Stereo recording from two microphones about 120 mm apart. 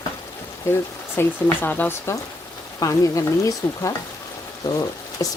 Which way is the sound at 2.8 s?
30° left (ahead or behind).